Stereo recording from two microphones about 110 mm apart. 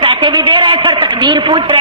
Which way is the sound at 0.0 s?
50° right (ahead or behind).